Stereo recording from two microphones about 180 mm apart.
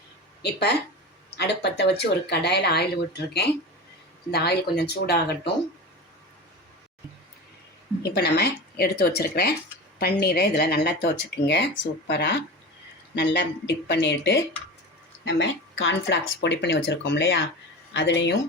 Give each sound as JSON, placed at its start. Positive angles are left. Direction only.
{"t": 0.4, "sound": "speech", "side_deg": 65}
{"t": 8.0, "sound": "speech", "side_deg": 65}
{"t": 15.2, "sound": "speech", "side_deg": 90}